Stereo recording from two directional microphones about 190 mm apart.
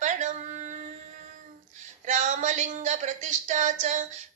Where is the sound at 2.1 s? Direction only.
40° right (ahead or behind).